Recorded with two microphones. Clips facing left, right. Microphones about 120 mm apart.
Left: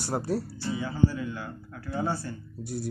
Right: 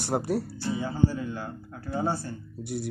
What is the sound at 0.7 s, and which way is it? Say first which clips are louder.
Music: even; 35° right (ahead or behind).